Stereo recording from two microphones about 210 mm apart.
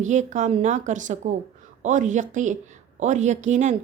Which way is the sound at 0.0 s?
35° right (ahead or behind).